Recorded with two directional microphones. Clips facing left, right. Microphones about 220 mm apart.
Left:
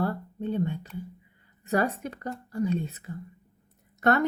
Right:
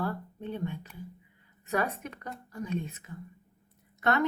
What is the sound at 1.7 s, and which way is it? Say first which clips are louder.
A woman's voice: left 5 dB; 35° left (ahead or behind).